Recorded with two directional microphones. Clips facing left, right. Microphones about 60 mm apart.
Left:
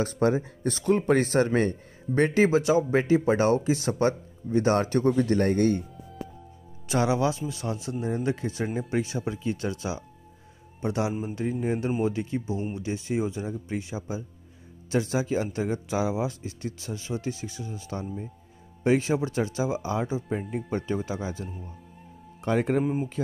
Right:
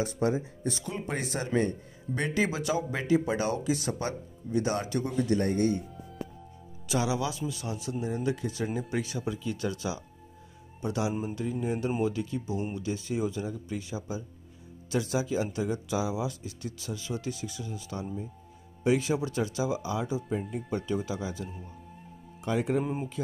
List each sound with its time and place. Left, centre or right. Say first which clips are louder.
0.0 s speech: left 4 dB; left
2.1 s speech: left 8 dB; left
6.9 s speech: left 5 dB; left
20.2 s speech: left 2 dB; left
20.7 s speech: left 1 dB; left
22.4 s speech: left 4 dB; left